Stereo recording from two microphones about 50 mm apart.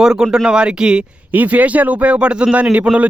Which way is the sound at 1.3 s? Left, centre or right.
Right.